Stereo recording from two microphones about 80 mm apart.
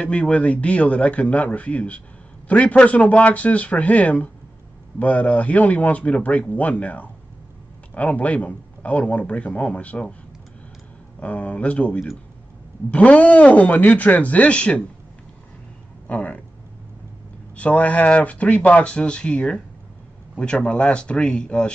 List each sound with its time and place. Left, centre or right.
0.0 s speech: centre
11.1 s speech: centre
16.1 s speech: centre
17.6 s speech: centre